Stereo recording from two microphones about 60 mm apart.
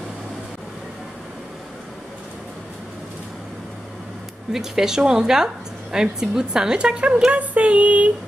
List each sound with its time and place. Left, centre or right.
4.5 s a woman's voice: centre
7.2 s female singing: right